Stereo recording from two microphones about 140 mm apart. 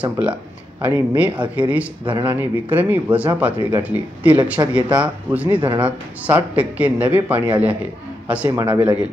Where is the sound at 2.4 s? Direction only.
10° right (ahead or behind).